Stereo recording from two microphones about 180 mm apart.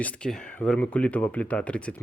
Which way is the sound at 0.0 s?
5° left (ahead or behind).